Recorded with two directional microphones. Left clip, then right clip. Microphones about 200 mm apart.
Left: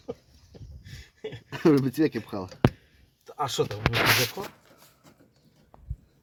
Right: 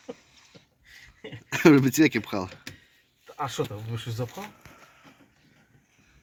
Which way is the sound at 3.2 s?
40° left (ahead or behind).